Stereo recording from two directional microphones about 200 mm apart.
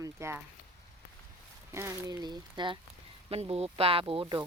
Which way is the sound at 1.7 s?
15° right (ahead or behind).